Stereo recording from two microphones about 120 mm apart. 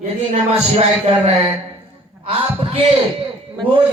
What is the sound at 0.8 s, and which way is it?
Speech, 55° right (ahead or behind).